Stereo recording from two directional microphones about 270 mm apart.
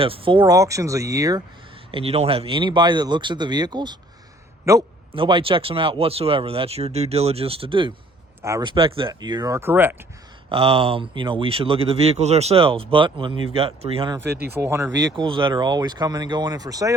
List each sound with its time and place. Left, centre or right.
0.0 s speech: centre
10.5 s speech: right
14.2 s speech: right
14.5 s speech: centre